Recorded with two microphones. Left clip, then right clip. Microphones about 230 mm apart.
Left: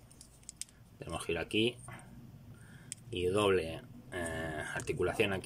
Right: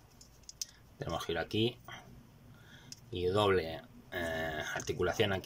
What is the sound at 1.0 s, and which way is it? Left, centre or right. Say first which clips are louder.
Speech: right 1 dB; centre.